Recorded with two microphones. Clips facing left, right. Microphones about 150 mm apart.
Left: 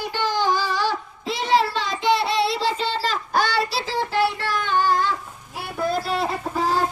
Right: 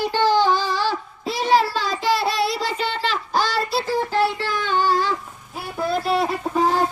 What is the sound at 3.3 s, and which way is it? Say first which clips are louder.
Child singing: even; 65° left (ahead or behind).